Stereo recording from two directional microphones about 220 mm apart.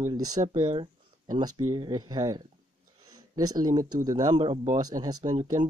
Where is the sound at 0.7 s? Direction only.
20° right (ahead or behind).